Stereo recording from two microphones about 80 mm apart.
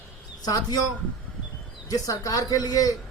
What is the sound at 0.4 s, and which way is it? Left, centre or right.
Speech, left.